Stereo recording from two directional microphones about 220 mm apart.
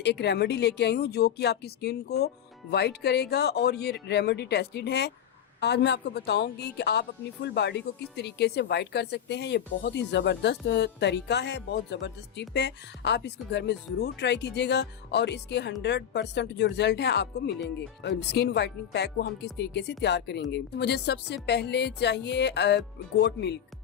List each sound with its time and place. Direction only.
0.0 s speech: 50° left (ahead or behind)